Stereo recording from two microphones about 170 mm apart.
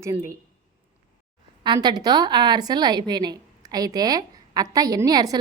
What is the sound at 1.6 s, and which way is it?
A woman's voice, 25° right (ahead or behind).